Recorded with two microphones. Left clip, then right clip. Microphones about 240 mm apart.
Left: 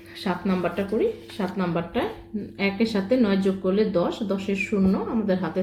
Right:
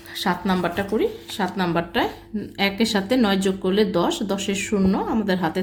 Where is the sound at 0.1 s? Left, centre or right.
Right.